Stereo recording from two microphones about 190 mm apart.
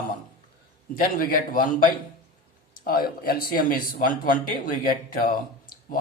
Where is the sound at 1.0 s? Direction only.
45° left (ahead or behind).